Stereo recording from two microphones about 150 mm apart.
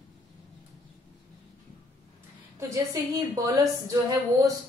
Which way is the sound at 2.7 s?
20° right (ahead or behind).